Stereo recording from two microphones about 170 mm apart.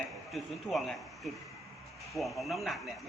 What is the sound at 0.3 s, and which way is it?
A man's voice, centre (ahead or behind).